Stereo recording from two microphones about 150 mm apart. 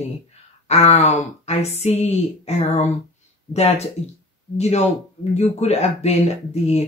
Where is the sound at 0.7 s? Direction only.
45° left (ahead or behind).